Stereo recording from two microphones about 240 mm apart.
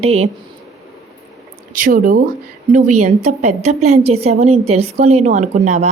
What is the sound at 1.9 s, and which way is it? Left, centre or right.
Speech, right.